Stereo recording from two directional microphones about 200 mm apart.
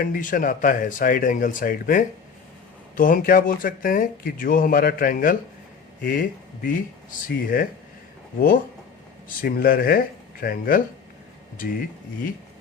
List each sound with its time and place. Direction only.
0.0 s speech: 40° left (ahead or behind)
9.4 s speech: 50° left (ahead or behind)